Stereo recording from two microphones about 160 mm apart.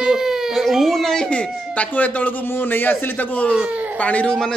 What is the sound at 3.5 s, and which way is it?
Speech, 10° right (ahead or behind).